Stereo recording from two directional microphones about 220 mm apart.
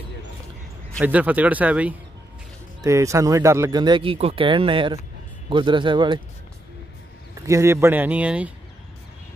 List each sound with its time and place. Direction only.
1.0 s speech: 5° right (ahead or behind)
7.3 s speech: 15° right (ahead or behind)